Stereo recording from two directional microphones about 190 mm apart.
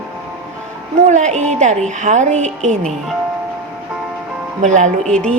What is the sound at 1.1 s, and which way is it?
A woman's voice, 40° right (ahead or behind).